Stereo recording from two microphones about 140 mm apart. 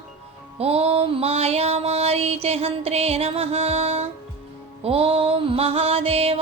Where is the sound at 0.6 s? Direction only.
45° right (ahead or behind).